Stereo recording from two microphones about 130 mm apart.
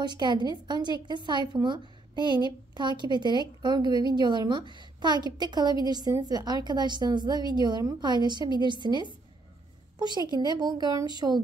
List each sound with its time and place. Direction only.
0.0 s a woman's voice: 35° right (ahead or behind)